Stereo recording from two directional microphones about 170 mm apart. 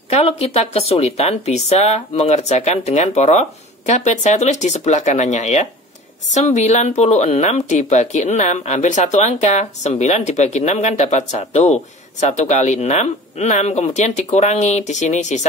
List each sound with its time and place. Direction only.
0.1 s speech: 40° left (ahead or behind)